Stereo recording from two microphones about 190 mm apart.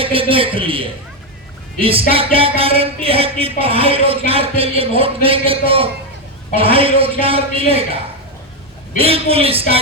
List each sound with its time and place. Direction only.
0.0 s speech: 30° right (ahead or behind)
9.0 s speech: 30° right (ahead or behind)